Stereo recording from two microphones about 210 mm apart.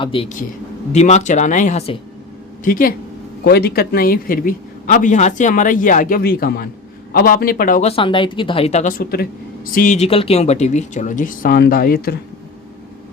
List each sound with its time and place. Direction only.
0.0 s a man's voice: 25° left (ahead or behind); by 12.1 s 45° left (ahead or behind)